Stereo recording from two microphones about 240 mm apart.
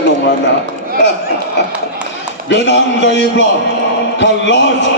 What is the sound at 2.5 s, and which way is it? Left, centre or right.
Speech, left.